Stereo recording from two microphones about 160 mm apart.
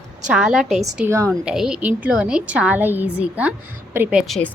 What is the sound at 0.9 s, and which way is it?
Speech, 15° right (ahead or behind).